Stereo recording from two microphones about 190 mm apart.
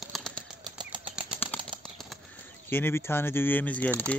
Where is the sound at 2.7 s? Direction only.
10° left (ahead or behind).